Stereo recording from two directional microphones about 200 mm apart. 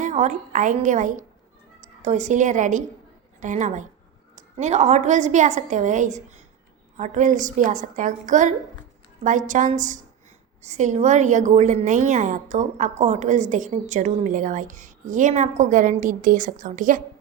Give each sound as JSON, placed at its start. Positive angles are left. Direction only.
{"t": 0.0, "sound": "a woman's voice", "side_deg": -35}